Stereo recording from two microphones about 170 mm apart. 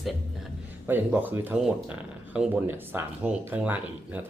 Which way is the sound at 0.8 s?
10° right (ahead or behind).